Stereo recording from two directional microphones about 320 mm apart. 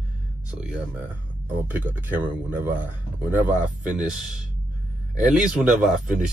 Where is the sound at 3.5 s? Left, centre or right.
Right.